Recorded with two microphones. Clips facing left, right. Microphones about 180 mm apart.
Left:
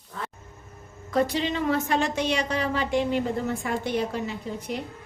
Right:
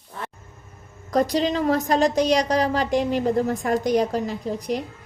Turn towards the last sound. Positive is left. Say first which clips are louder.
# right 6 dB
turn(degrees=-40)  # may be behind; listen again after turning